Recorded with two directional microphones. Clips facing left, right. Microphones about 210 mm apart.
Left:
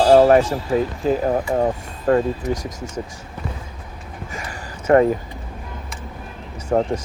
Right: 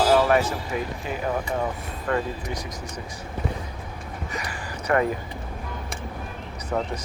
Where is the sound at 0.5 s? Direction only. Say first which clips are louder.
Left 8 dB; 35° left (ahead or behind).